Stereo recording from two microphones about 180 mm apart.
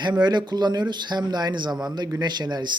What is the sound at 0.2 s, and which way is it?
Speech, 25° right (ahead or behind).